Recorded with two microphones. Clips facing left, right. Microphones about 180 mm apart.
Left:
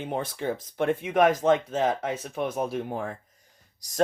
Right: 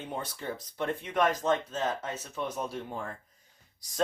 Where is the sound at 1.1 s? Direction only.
55° left (ahead or behind).